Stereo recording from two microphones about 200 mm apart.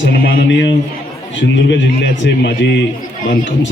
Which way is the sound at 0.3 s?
65° left (ahead or behind).